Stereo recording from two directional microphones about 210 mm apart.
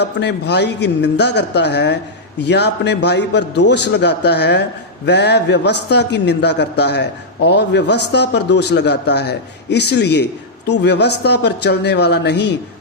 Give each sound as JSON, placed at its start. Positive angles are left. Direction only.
{"t": 0.0, "sound": "a man's voice", "side_deg": 55}